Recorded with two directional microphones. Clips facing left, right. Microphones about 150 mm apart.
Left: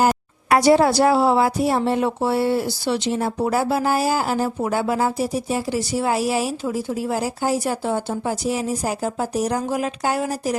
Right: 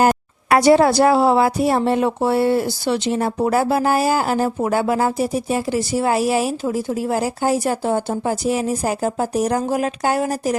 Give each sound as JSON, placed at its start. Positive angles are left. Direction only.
{"t": 0.5, "sound": "a woman's voice", "side_deg": -60}